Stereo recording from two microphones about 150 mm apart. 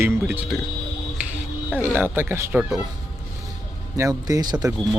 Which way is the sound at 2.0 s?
15° right (ahead or behind).